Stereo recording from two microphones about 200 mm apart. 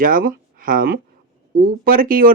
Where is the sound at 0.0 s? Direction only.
45° right (ahead or behind).